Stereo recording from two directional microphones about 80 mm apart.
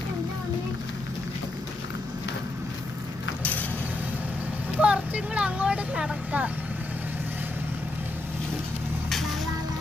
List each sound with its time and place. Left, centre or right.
3.4 s vehicle: centre
4.8 s vehicle: centre